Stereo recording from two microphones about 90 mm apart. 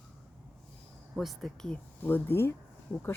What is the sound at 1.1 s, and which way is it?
Speech, centre (ahead or behind).